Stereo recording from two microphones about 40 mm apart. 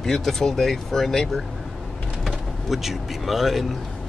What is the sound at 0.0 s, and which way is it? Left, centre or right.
Speech, centre.